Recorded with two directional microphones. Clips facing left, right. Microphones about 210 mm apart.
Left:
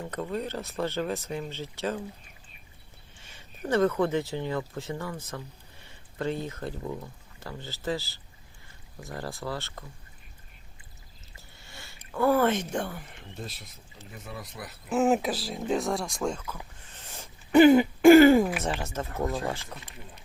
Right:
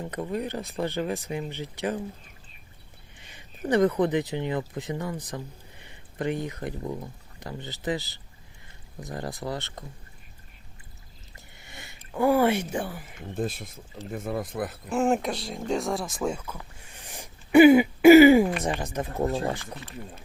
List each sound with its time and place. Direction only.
0.0 s speech: 15° right (ahead or behind)
3.2 s speech: 15° right (ahead or behind)
11.3 s a sound: 20° right (ahead or behind)
13.3 s speech: 50° right (ahead or behind)
14.8 s speech: 5° left (ahead or behind)
16.8 s throat clearing: 15° right (ahead or behind)
19.2 s speech: 30° right (ahead or behind)